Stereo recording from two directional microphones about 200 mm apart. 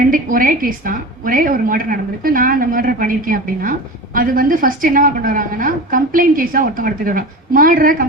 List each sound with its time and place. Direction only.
0.0 s a woman's voice: 45° right (ahead or behind)